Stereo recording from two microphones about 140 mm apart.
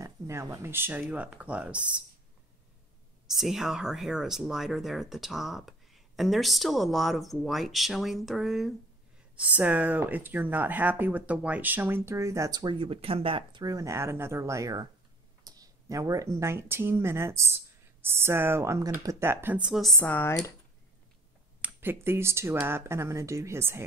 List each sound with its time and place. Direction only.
0.0 s speech: 20° right (ahead or behind)
3.3 s speech: centre (ahead or behind)
20.0 s speech: 15° left (ahead or behind)
21.5 s speech: 15° right (ahead or behind)